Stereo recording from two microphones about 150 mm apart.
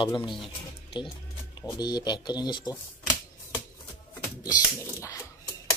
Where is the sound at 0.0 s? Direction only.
35° left (ahead or behind).